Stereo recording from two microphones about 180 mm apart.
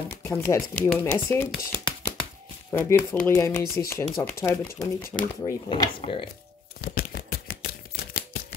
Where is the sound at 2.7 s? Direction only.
10° left (ahead or behind).